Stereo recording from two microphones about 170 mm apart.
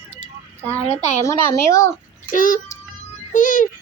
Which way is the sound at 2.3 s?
55° left (ahead or behind).